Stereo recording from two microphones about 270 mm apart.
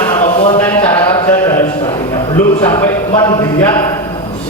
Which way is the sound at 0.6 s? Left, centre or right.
Centre.